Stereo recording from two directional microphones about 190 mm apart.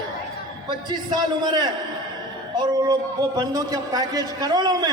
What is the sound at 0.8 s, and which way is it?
A man's voice, 20° right (ahead or behind).